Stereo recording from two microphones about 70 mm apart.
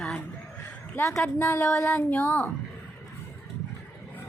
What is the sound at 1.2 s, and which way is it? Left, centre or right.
Speech, left.